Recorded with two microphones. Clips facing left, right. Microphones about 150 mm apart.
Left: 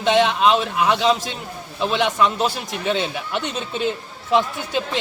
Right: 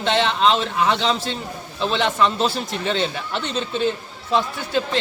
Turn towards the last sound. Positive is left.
turn(degrees=15)  # may be behind; listen again after turning